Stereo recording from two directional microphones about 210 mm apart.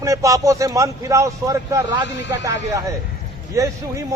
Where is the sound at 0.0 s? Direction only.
15° right (ahead or behind).